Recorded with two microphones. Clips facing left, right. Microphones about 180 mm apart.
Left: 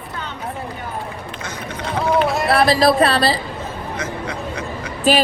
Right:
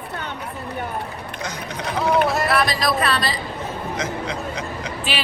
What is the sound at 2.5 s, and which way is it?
Speech, 30° left (ahead or behind).